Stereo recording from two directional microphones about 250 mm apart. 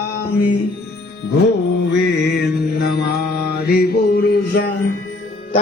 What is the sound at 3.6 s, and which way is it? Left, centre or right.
Mantra, left.